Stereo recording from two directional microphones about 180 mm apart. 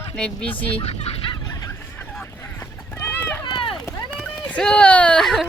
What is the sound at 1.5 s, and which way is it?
Horse, 15° left (ahead or behind).